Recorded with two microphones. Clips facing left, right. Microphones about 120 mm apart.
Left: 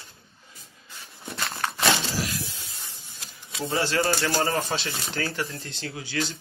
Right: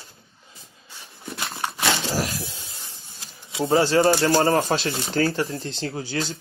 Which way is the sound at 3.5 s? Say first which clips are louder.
Right 7 dB; 25° right (ahead or behind).